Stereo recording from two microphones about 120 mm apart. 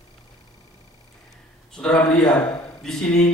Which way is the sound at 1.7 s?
5° left (ahead or behind).